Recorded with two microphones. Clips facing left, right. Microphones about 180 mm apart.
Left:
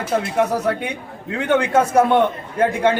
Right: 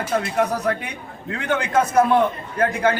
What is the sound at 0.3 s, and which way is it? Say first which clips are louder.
A man's voice: left 3 dB; 25° left (ahead or behind).